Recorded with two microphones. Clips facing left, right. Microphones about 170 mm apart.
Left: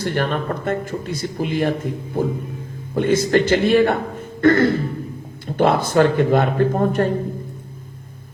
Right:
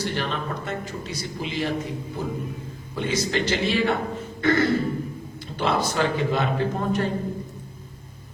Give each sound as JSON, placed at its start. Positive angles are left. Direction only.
{"t": 0.0, "sound": "speech", "side_deg": 50}